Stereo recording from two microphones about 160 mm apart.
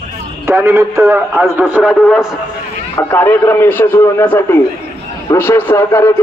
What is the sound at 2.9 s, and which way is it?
A man's voice, 10° left (ahead or behind).